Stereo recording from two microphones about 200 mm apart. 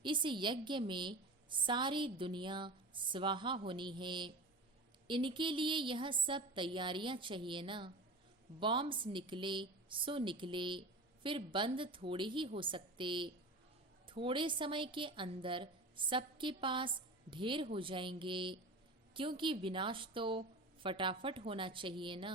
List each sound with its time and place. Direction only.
0.0 s a woman's voice: 25° right (ahead or behind)